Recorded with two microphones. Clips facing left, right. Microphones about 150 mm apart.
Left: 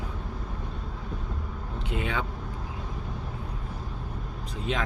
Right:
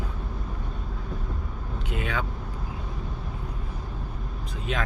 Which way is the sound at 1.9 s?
25° left (ahead or behind).